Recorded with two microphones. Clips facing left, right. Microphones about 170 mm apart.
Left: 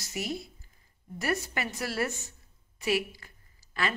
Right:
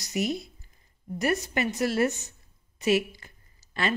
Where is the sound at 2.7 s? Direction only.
20° right (ahead or behind).